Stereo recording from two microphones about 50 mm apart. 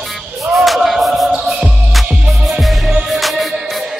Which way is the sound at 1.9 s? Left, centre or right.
Centre.